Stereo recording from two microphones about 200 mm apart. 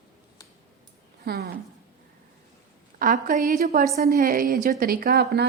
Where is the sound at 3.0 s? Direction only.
45° right (ahead or behind).